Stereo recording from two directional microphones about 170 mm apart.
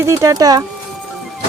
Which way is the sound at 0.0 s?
15° right (ahead or behind).